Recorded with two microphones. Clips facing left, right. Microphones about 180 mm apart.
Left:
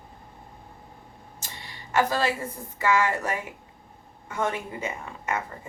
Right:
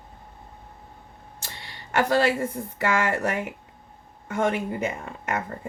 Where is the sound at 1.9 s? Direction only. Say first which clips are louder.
Right 3 dB; 70° right (ahead or behind).